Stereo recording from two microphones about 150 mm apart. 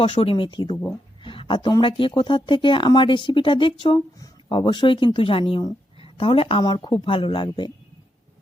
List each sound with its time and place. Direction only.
0.0 s speech: 35° left (ahead or behind)